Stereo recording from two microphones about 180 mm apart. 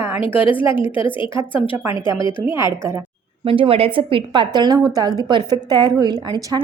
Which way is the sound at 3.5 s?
30° right (ahead or behind).